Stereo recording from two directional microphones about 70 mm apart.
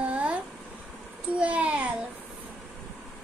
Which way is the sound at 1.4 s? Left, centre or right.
Centre.